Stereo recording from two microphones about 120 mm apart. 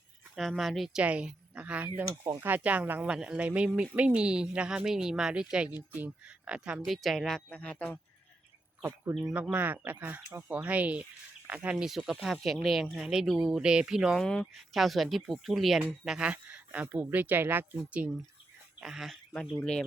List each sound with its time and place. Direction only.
0.3 s speech: centre (ahead or behind)
2.2 s speech: 25° right (ahead or behind)
2.5 s speech: 10° right (ahead or behind); by 7.9 s 10° left (ahead or behind)
9.3 s speech: 15° right (ahead or behind)
18.8 s speech: 5° right (ahead or behind)